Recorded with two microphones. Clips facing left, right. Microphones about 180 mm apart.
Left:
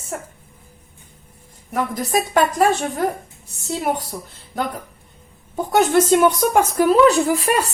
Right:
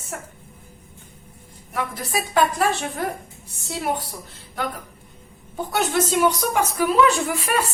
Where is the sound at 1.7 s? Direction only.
45° left (ahead or behind).